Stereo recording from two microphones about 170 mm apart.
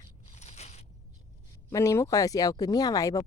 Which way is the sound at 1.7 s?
20° left (ahead or behind).